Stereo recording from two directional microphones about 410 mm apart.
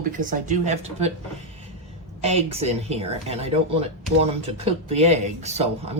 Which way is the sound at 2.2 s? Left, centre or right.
Centre.